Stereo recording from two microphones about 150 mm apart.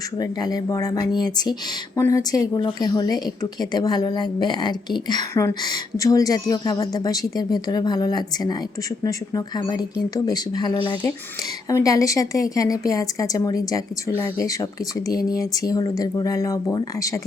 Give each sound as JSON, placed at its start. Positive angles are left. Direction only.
{"t": 0.2, "sound": "a woman's voice", "side_deg": 25}
{"t": 11.7, "sound": "a woman's voice", "side_deg": 20}